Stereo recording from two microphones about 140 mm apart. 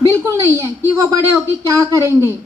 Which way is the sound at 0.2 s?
20° right (ahead or behind).